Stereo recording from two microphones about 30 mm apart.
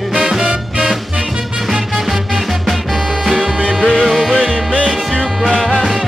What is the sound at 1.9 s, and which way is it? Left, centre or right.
Music, centre.